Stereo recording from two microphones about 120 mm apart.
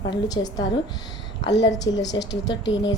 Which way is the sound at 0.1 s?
30° left (ahead or behind).